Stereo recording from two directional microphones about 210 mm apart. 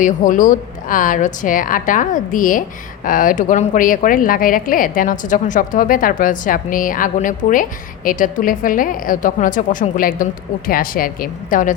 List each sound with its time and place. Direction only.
0.0 s speech: 40° left (ahead or behind)